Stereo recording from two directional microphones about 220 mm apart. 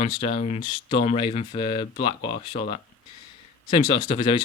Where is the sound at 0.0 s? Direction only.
25° left (ahead or behind).